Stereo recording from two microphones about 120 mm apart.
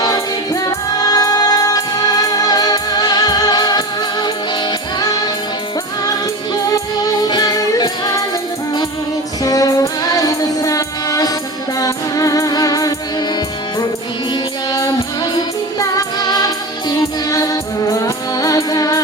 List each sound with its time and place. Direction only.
0.0 s music: 30° left (ahead or behind)
9.4 s music: 30° left (ahead or behind)
14.7 s music: 30° left (ahead or behind)